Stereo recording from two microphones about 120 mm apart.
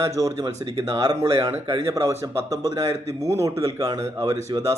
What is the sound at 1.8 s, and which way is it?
Speech, 25° right (ahead or behind).